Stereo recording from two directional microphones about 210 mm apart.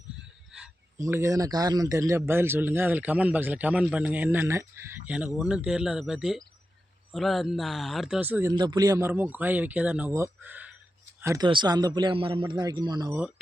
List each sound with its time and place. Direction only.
0.9 s a man's voice: 15° right (ahead or behind)